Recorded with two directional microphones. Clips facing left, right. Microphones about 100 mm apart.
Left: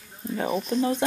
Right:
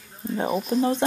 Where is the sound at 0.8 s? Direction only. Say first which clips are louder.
Right 2 dB; 30° right (ahead or behind).